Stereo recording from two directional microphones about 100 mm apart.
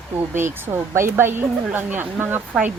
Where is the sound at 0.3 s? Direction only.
25° right (ahead or behind).